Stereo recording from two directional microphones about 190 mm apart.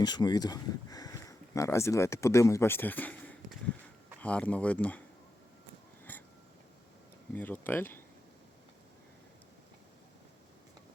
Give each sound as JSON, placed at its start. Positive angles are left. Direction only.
{"t": 0.0, "sound": "speech", "side_deg": 20}
{"t": 6.1, "sound": "a sound", "side_deg": 10}
{"t": 7.3, "sound": "speech", "side_deg": 10}